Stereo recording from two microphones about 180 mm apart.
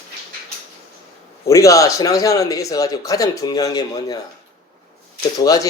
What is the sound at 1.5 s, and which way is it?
Speech, 20° left (ahead or behind).